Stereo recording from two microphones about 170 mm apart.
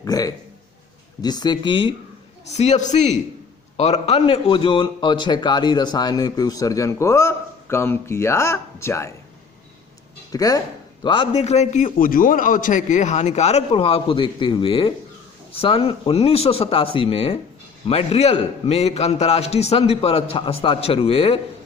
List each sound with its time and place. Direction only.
0.0 s a man's voice: 20° left (ahead or behind)
2.5 s a man's voice: 40° left (ahead or behind); by 9.0 s 15° left (ahead or behind)
10.3 s a man's voice: 20° left (ahead or behind); by 21.3 s 35° left (ahead or behind)